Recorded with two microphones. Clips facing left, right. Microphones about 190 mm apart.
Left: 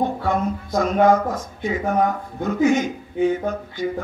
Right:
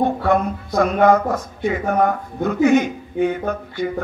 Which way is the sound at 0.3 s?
60° right (ahead or behind).